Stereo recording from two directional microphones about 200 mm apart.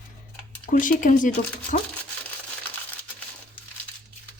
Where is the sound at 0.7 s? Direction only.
40° left (ahead or behind).